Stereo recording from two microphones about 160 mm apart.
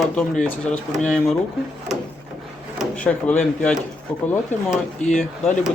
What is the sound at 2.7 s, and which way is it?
Speech, 10° left (ahead or behind).